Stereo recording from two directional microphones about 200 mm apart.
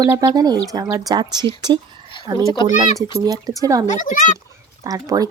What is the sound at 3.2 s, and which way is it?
Speech, 20° right (ahead or behind).